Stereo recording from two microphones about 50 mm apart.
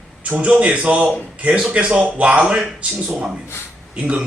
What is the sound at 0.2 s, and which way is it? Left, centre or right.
A man's voice, right.